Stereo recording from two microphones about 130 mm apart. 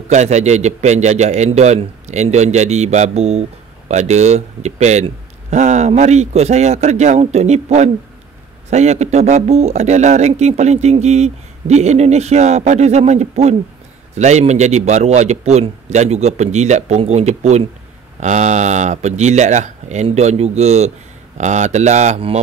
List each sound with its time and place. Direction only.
0.1 s speech: 60° right (ahead or behind)